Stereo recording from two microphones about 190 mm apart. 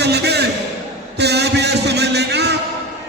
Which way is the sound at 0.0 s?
60° right (ahead or behind).